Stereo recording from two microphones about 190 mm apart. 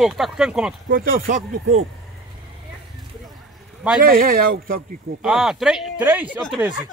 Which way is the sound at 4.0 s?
50° right (ahead or behind).